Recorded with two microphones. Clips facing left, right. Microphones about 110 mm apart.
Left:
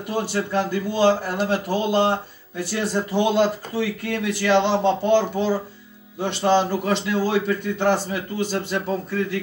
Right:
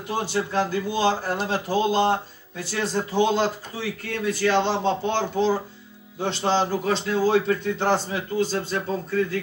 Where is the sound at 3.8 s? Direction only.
70° left (ahead or behind).